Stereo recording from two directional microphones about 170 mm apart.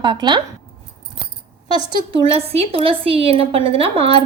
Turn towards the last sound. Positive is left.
turn(degrees=-35)  # may be behind; listen again after turning